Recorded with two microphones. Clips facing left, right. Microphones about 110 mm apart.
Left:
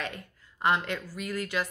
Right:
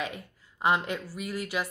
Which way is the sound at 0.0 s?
10° right (ahead or behind).